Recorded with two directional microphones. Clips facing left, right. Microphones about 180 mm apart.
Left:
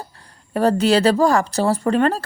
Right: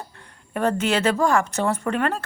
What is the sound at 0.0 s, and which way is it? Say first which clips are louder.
Speech: left 2 dB; 35° left (ahead or behind).